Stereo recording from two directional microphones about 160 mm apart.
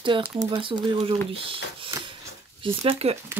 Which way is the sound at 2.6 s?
35° right (ahead or behind).